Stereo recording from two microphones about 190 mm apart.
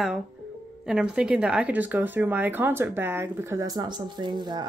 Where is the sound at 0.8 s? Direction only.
5° right (ahead or behind).